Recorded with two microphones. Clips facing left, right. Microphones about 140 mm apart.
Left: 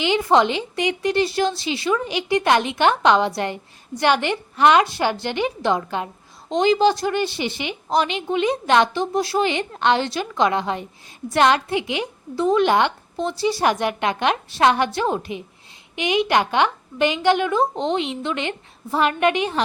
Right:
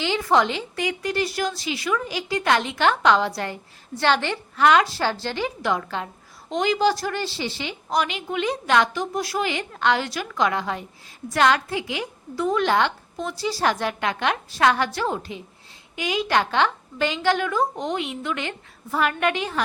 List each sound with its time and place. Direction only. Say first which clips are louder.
0.0 s a woman's voice: left 3 dB; 20° left (ahead or behind)